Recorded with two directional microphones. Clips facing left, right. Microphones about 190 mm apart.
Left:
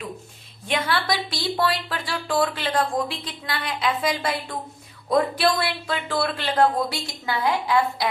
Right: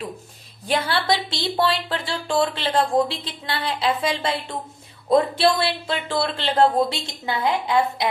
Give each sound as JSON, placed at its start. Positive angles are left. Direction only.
{"t": 0.7, "sound": "speech", "side_deg": -30}